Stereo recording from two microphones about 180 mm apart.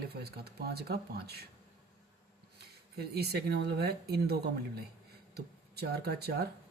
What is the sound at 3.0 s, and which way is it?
Speech, 60° right (ahead or behind).